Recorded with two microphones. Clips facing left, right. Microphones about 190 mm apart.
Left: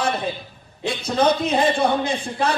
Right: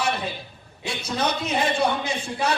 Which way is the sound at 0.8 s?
55° left (ahead or behind).